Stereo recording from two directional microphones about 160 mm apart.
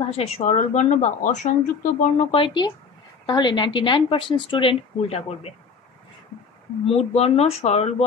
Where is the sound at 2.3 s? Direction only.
30° left (ahead or behind).